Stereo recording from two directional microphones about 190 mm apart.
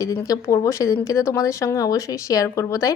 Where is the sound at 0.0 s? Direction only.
20° left (ahead or behind).